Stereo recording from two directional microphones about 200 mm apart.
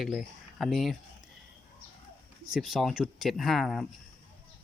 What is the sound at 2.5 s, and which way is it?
Speech, centre (ahead or behind).